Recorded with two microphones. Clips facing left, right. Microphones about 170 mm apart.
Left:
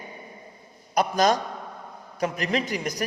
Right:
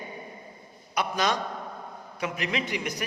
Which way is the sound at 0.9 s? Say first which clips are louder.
Left 6 dB; 40° left (ahead or behind).